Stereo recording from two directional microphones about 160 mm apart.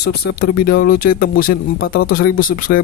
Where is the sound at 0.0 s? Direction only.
85° left.